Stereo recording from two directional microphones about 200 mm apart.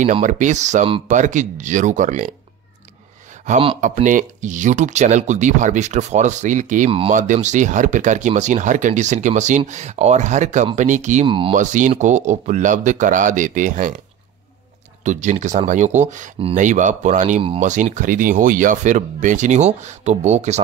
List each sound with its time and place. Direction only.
0.0 s speech: 40° right (ahead or behind)
3.4 s speech: 35° right (ahead or behind)
6.9 s speech: 25° right (ahead or behind)
7.2 s speech: 35° right (ahead or behind)
11.2 s speech: 25° right (ahead or behind)
11.5 s speech: 40° right (ahead or behind)
15.0 s speech: 35° right (ahead or behind)